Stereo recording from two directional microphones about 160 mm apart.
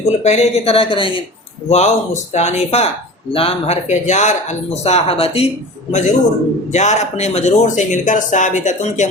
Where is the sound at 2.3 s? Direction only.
45° left (ahead or behind).